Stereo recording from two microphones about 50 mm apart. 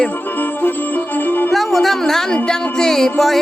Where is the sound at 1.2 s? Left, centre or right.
Left.